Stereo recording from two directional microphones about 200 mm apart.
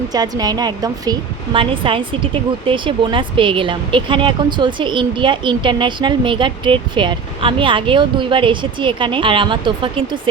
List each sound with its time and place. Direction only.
0.1 s speech: 20° right (ahead or behind)